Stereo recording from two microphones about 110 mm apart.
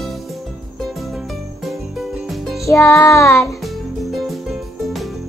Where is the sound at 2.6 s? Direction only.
25° left (ahead or behind).